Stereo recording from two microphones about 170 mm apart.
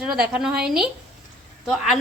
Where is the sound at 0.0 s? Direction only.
5° right (ahead or behind).